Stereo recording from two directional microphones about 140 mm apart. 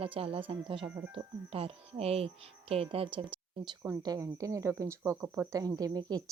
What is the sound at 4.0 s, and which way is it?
Speech, 25° right (ahead or behind).